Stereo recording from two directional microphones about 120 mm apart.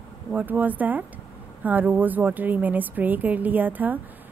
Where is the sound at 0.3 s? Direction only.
15° right (ahead or behind).